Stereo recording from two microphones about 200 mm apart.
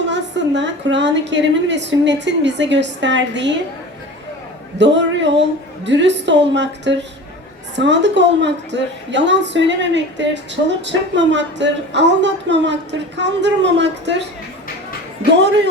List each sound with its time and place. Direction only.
0.0 s a woman's voice: 60° right (ahead or behind)
4.8 s a woman's voice: 60° right (ahead or behind)
15.3 s a woman's voice: 60° right (ahead or behind)